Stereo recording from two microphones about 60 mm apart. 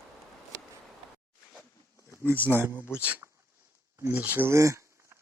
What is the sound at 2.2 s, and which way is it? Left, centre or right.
Speech, left.